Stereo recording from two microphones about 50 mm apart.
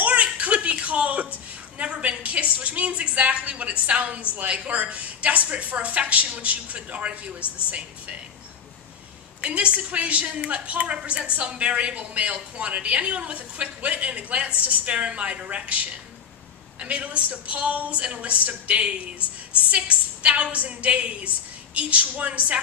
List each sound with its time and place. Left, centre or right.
0.0 s a sound: right
1.8 s a woman's voice: right
9.4 s a woman's voice: right
16.8 s a woman's voice: right